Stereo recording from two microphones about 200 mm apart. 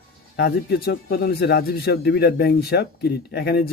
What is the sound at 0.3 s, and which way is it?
Speech, 50° left (ahead or behind).